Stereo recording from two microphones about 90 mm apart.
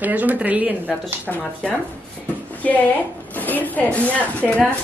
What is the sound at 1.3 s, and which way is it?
Speech, 5° left (ahead or behind).